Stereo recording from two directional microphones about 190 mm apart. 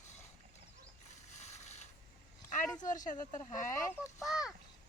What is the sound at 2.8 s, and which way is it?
Speech, 45° left (ahead or behind).